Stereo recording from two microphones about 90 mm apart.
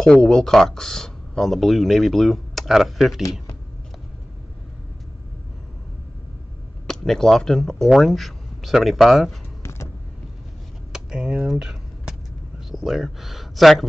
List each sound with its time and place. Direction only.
0.0 s speech: 5° left (ahead or behind)
3.2 s speech: 40° left (ahead or behind)
6.9 s speech: 5° left (ahead or behind)
9.6 s vehicle: 30° left (ahead or behind)
10.9 s vehicle: 10° right (ahead or behind)